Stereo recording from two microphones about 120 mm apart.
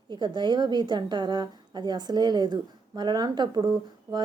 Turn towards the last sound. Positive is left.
turn(degrees=-35)  # may be behind; listen again after turning